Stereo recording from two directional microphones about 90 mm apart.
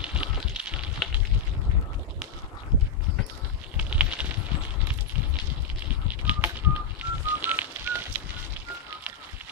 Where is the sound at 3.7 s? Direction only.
15° right (ahead or behind).